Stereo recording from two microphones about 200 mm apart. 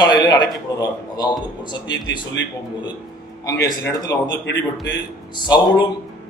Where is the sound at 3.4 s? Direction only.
15° left (ahead or behind).